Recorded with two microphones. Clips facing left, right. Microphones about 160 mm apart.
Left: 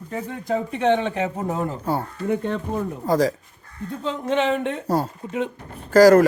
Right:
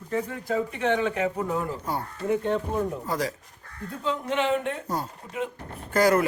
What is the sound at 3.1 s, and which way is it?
Speech, 35° left (ahead or behind).